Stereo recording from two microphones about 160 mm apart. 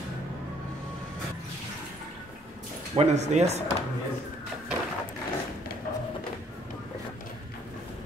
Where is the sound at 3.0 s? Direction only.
45° right (ahead or behind).